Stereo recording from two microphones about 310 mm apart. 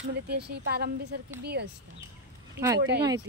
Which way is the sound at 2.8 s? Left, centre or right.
Right.